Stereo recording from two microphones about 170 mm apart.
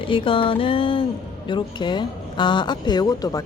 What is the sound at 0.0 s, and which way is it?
Speech, 30° left (ahead or behind).